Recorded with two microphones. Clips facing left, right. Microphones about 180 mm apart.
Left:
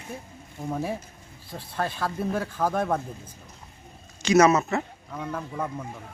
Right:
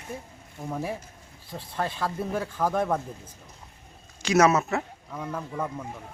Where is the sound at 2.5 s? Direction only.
5° left (ahead or behind).